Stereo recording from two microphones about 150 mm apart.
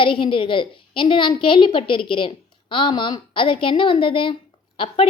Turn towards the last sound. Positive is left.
turn(degrees=35)  # may be behind; listen again after turning